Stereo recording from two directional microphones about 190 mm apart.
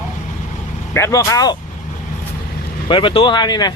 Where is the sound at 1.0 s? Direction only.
15° left (ahead or behind).